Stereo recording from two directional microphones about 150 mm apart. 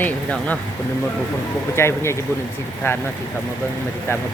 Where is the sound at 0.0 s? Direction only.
10° left (ahead or behind).